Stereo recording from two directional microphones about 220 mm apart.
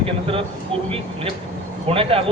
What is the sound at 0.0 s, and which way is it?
Speech, 25° right (ahead or behind).